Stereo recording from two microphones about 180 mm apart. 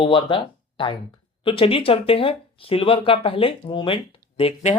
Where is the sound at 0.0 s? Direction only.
30° left (ahead or behind).